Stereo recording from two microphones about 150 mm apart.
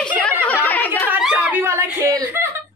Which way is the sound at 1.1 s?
10° right (ahead or behind).